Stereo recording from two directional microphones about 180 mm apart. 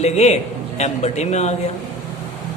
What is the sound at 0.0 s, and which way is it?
A man's voice, 35° left (ahead or behind).